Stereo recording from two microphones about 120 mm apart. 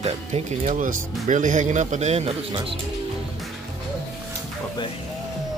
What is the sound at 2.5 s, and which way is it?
Speech, 45° right (ahead or behind).